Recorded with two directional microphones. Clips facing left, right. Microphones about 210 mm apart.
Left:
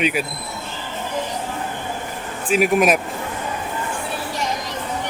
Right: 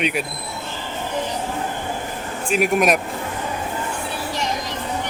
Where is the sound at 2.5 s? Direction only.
Centre (ahead or behind).